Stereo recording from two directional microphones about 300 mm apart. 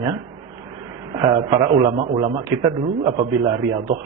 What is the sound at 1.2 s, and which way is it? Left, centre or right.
A man's voice, centre.